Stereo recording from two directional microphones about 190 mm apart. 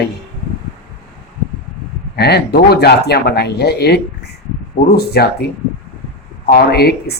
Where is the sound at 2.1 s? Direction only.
60° left (ahead or behind).